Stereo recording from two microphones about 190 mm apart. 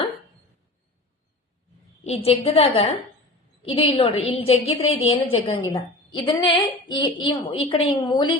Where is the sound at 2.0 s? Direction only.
30° left (ahead or behind).